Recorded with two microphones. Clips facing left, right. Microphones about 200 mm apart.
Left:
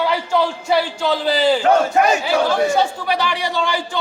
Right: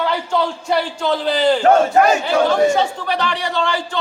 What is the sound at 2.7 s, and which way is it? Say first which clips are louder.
Speech: even; 10° left (ahead or behind).